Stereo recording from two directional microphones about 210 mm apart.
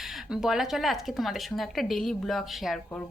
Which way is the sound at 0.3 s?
Centre (ahead or behind).